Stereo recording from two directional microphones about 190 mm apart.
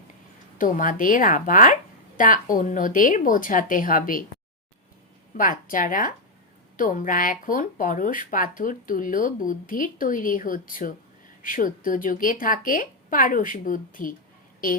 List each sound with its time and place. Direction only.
0.6 s speech: 45° left (ahead or behind)
5.3 s speech: 45° left (ahead or behind)